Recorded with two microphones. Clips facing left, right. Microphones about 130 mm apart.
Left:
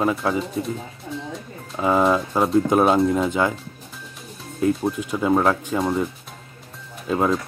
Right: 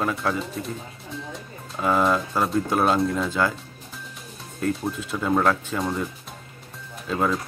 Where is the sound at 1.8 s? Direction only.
20° left (ahead or behind).